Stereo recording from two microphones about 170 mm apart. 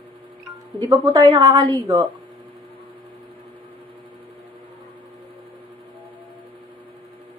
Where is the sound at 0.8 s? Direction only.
20° right (ahead or behind).